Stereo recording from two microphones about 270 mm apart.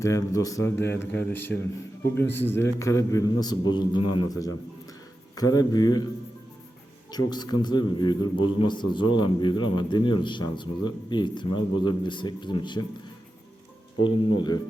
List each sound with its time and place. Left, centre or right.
0.0 s a man's voice: centre
7.1 s a man's voice: centre
14.0 s a man's voice: centre